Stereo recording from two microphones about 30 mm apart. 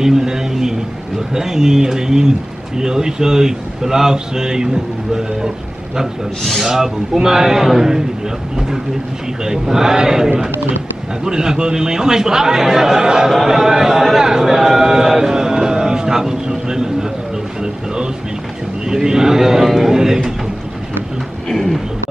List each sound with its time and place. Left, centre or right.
0.0 s a man's voice: centre
6.4 s speech: centre
6.7 s a man's voice: centre
15.4 s vehicle: right
17.6 s a man's voice: right
21.5 s a sound: centre